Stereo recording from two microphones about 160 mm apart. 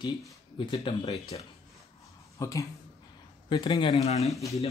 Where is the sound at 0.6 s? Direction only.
30° left (ahead or behind).